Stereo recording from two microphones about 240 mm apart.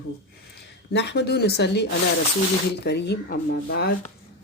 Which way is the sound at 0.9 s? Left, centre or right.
Left.